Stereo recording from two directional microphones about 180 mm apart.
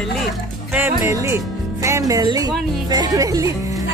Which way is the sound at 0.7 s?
15° right (ahead or behind).